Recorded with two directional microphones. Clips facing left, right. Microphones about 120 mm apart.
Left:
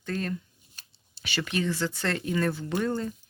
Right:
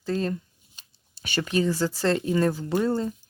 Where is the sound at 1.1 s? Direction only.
40° right (ahead or behind).